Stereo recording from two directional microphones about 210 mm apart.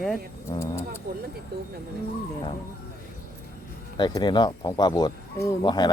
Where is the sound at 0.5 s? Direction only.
15° left (ahead or behind).